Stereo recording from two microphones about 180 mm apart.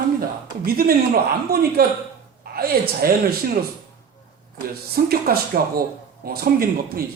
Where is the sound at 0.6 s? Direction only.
55° right (ahead or behind).